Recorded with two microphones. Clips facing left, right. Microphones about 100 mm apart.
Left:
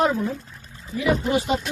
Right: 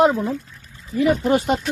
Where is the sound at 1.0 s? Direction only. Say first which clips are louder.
Right 4 dB; 50° right (ahead or behind).